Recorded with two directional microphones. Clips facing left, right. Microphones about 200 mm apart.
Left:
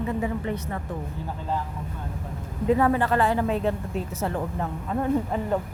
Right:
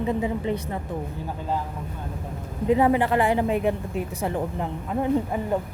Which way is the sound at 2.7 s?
15° right (ahead or behind).